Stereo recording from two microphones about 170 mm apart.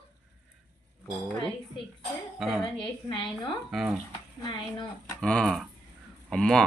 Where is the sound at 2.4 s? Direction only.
Centre (ahead or behind).